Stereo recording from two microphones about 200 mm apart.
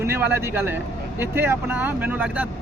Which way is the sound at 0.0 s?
10° right (ahead or behind).